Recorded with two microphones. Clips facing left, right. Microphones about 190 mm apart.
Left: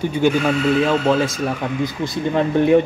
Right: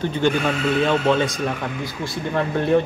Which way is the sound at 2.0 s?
15° left (ahead or behind).